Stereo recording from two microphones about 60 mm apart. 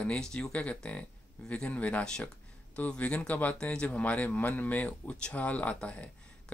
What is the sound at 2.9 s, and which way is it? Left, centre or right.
Speech, left.